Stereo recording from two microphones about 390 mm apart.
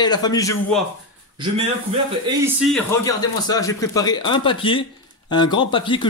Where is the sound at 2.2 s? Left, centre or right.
Centre.